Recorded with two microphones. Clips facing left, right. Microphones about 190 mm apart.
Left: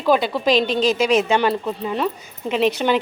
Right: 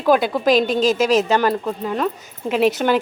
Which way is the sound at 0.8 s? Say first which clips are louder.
Right 1 dB; 45° right (ahead or behind).